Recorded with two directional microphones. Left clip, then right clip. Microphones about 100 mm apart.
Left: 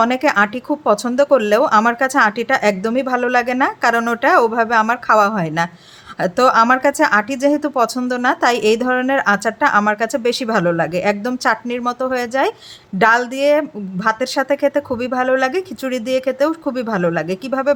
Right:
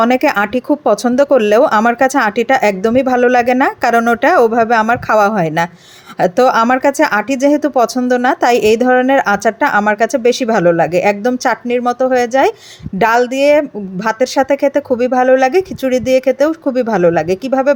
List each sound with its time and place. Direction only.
0.0 s speech: 45° right (ahead or behind); by 17.7 s 30° right (ahead or behind)